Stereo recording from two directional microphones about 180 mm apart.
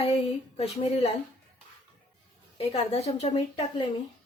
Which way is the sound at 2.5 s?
30° left (ahead or behind).